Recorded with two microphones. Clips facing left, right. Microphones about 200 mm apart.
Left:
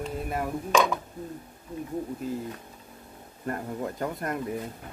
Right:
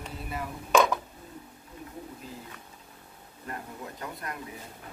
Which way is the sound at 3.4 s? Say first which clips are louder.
Left 8 dB; 50° left (ahead or behind).